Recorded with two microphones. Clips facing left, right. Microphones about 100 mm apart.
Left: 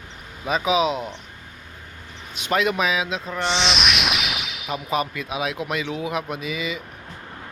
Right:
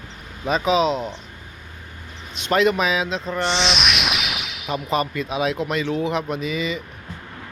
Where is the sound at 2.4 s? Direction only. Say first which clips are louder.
Right 3 dB; 5° left (ahead or behind).